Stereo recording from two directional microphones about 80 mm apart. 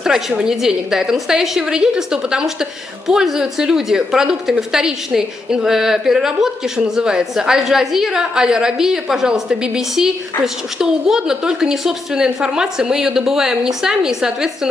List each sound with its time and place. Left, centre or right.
0.0 s a woman's voice: centre